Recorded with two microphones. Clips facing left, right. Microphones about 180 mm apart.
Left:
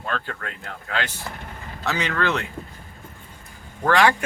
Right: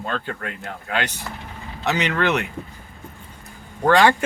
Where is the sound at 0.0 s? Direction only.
20° right (ahead or behind).